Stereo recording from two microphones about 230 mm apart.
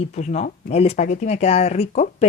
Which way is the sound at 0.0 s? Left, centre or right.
Left.